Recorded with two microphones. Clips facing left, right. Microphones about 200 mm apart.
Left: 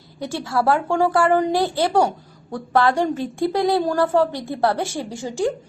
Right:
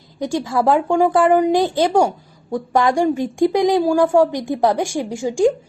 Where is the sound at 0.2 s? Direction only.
15° right (ahead or behind).